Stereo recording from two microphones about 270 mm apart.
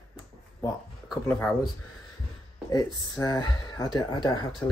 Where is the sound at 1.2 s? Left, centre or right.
Centre.